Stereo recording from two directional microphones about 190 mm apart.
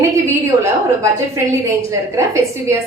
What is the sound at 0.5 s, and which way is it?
Speech, 15° right (ahead or behind).